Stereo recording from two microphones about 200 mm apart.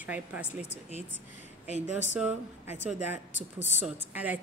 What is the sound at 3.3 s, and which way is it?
Speech, 35° left (ahead or behind).